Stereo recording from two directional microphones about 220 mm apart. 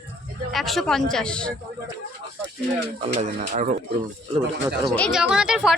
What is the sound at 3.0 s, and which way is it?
Speech, 30° right (ahead or behind).